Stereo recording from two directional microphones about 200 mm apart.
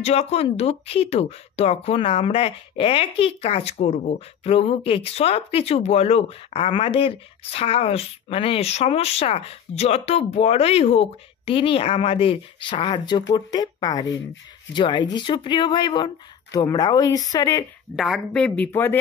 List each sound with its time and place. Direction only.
0.0 s speech: 30° left (ahead or behind)
17.9 s speech: centre (ahead or behind)